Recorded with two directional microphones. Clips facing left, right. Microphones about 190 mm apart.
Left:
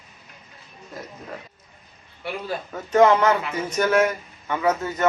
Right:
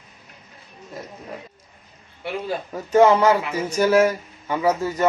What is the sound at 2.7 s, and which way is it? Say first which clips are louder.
Mantra: right 1 dB; 10° right (ahead or behind).